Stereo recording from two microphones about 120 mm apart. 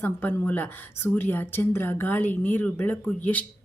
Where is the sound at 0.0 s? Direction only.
15° left (ahead or behind).